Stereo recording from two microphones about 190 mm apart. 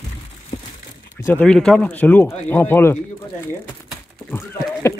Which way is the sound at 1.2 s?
10° left (ahead or behind).